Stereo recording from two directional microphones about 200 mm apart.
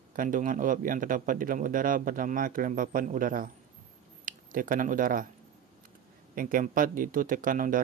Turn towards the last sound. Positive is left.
turn(degrees=-40)  # may be behind; listen again after turning